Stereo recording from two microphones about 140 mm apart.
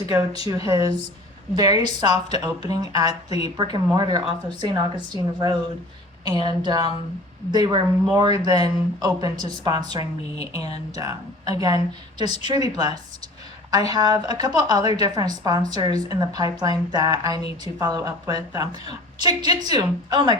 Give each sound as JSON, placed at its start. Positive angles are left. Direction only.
{"t": 0.4, "sound": "a woman's voice", "side_deg": -25}